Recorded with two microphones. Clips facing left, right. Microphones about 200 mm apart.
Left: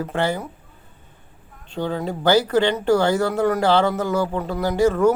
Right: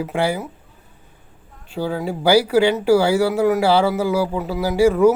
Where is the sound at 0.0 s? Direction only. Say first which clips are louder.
Right 2 dB; 10° right (ahead or behind).